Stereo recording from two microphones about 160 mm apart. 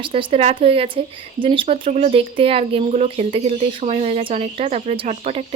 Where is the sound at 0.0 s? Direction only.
35° right (ahead or behind).